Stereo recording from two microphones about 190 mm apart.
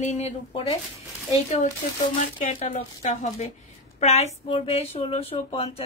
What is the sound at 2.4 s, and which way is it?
Speech, 35° left (ahead or behind).